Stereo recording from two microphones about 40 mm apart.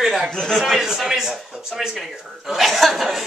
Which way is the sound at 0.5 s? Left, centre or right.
Centre.